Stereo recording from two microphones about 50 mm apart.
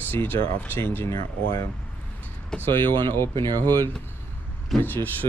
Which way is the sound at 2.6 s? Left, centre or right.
Left.